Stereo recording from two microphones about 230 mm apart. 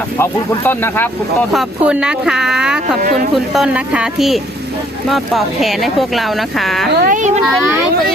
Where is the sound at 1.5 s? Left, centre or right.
Centre.